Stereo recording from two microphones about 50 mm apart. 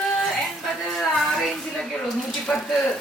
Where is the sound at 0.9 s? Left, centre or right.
Centre.